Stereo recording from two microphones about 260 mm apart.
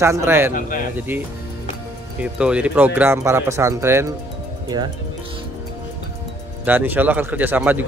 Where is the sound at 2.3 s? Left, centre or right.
Centre.